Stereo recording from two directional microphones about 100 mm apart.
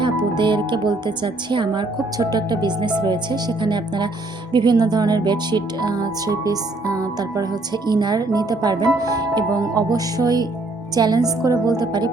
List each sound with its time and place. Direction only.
0.0 s a woman's voice: 50° right (ahead or behind)